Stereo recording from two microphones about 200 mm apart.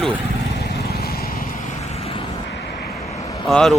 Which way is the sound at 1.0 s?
50° left (ahead or behind).